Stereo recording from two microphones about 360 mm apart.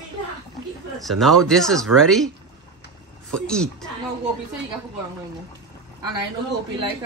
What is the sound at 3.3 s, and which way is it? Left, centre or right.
Speech, centre.